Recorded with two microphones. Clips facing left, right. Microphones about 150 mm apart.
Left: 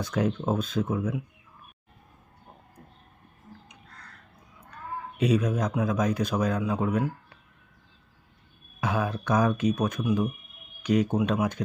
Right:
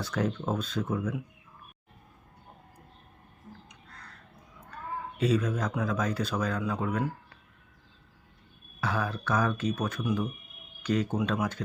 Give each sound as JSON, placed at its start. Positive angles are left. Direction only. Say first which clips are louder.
{"t": 0.0, "sound": "speech", "louder": "left 3 dB", "side_deg": 15}
{"t": 5.1, "sound": "speech", "louder": "left 3 dB", "side_deg": 15}
{"t": 8.8, "sound": "speech", "louder": "left 3 dB", "side_deg": 15}